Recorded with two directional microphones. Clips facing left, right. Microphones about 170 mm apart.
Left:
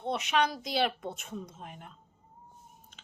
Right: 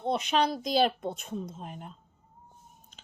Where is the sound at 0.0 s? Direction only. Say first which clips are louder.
Right 2 dB; 35° right (ahead or behind).